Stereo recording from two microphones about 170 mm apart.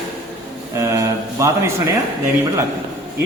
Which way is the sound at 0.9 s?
15° right (ahead or behind).